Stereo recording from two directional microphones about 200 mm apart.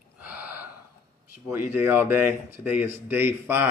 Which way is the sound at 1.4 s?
10° right (ahead or behind).